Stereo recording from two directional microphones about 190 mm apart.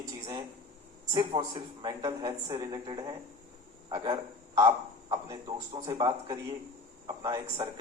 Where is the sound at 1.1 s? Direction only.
25° right (ahead or behind).